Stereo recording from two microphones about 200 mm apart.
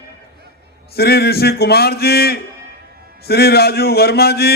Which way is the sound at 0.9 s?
50° left (ahead or behind).